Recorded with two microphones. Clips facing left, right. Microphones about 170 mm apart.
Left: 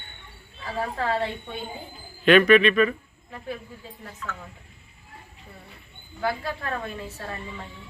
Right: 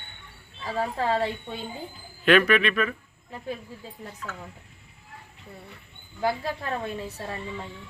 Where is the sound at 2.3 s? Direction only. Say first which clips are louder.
Left 4 dB; centre (ahead or behind).